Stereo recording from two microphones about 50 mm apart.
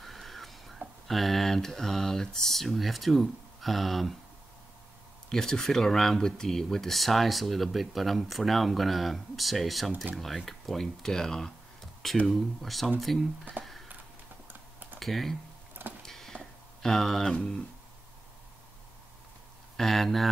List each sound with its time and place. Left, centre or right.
0.0 s a sound: centre
1.0 s speech: centre
5.3 s speech: centre
13.6 s a sound: right
14.5 s typing: right
15.0 s speech: centre
16.0 s tick-tock: centre
16.8 s speech: centre
19.8 s speech: centre